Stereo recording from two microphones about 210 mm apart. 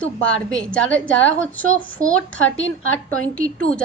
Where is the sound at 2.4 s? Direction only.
65° left (ahead or behind).